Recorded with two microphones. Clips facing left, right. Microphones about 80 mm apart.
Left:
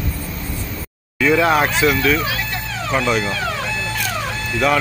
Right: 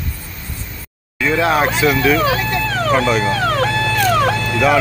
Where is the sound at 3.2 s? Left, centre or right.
Right.